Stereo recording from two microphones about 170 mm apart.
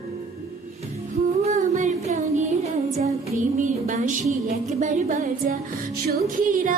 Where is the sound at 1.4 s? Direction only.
40° right (ahead or behind).